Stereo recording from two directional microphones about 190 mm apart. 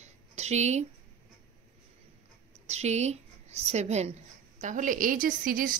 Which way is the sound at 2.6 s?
35° right (ahead or behind).